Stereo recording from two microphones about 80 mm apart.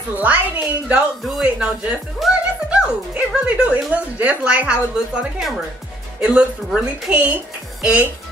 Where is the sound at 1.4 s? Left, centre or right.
Centre.